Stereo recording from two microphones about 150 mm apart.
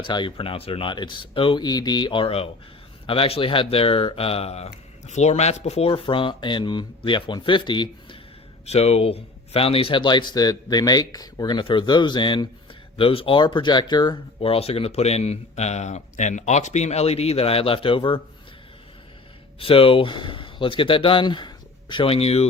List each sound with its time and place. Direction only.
0.0 s speech: 30° left (ahead or behind)
8.6 s speech: 45° left (ahead or behind)
19.5 s speech: 40° left (ahead or behind)